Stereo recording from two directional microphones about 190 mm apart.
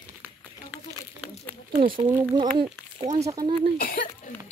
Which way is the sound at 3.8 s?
50° left (ahead or behind).